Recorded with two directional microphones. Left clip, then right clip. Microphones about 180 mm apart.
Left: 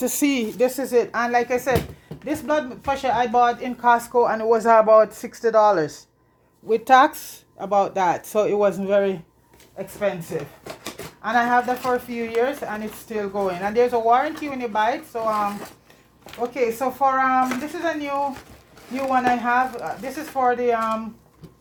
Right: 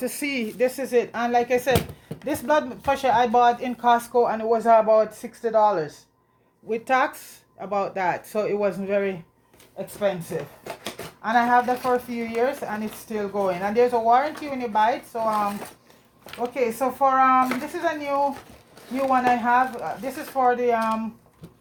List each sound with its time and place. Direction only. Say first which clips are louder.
0.0 s speech: left 5 dB; 40° left (ahead or behind); by 4.2 s 20° left (ahead or behind)
4.2 s speech: left 3 dB; 35° left (ahead or behind)
10.0 s speech: even; 20° left (ahead or behind)
10.6 s a sound: even; 10° left (ahead or behind)
11.2 s speech: even; 20° left (ahead or behind)
17.4 s speech: left 1 dB; 5° left (ahead or behind)
17.7 s speech: even; 20° left (ahead or behind)